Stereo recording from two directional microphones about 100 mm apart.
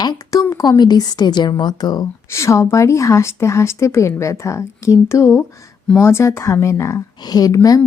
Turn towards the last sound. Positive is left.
turn(degrees=40)  # may be behind; listen again after turning